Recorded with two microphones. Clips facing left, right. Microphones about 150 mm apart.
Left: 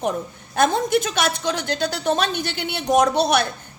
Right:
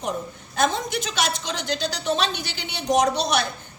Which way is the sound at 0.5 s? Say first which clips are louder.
Left 5 dB; 50° left (ahead or behind).